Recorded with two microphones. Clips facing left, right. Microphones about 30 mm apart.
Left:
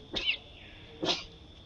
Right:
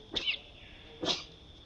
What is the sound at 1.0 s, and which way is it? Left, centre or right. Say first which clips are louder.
Dog: left 2 dB; centre.